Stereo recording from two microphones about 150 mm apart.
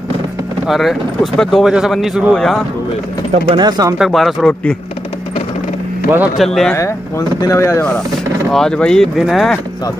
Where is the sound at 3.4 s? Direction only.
30° right (ahead or behind).